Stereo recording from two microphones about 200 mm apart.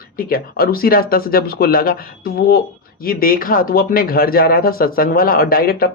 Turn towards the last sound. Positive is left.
turn(degrees=45)  # may be behind; listen again after turning